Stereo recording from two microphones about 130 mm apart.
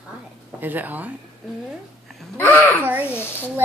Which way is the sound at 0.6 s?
15° right (ahead or behind).